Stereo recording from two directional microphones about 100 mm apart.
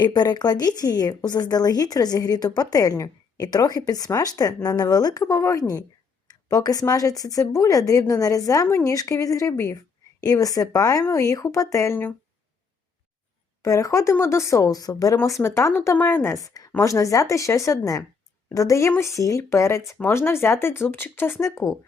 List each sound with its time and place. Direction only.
0.0 s speech: 45° left (ahead or behind)
5.2 s speech: 30° left (ahead or behind)
13.6 s speech: 35° left (ahead or behind)
15.2 s speech: 25° left (ahead or behind)
16.4 s speech: 35° left (ahead or behind)